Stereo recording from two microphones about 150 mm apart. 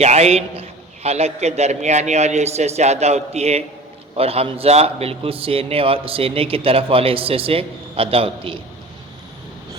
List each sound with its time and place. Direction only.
0.0 s a man's voice: 45° right (ahead or behind)